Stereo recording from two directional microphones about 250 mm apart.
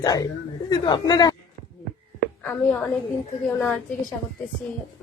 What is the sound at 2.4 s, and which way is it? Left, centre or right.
Speech, centre.